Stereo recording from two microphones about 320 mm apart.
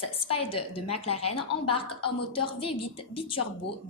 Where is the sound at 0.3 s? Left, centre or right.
Centre.